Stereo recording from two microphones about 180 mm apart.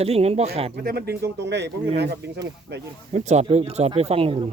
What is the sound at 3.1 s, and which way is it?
Speech, 40° right (ahead or behind).